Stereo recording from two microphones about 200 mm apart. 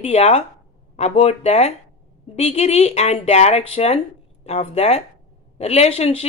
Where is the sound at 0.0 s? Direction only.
30° left (ahead or behind).